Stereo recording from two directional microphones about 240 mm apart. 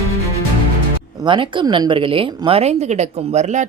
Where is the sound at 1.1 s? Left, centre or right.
Centre.